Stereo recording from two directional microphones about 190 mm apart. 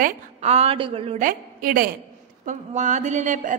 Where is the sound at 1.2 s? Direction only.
45° right (ahead or behind).